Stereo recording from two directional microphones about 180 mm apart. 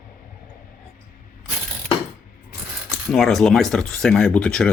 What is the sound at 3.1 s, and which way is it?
Speech, centre (ahead or behind).